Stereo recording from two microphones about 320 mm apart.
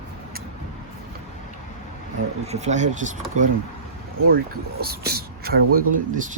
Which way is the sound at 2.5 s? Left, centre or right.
Right.